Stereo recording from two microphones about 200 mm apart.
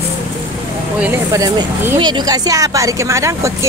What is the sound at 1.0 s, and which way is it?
Speech, 15° right (ahead or behind).